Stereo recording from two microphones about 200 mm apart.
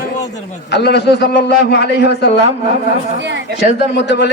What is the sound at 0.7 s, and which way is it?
A man's voice, 55° left (ahead or behind).